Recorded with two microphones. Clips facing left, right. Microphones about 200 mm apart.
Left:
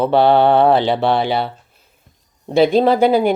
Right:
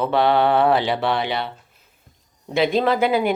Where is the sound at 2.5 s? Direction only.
35° left (ahead or behind).